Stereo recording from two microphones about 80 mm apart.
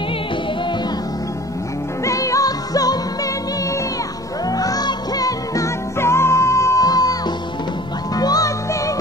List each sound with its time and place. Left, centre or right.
2.0 s music: left
4.5 s music: left
5.9 s music: left